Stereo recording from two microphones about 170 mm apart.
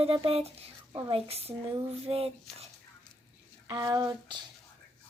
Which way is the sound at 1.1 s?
35° right (ahead or behind).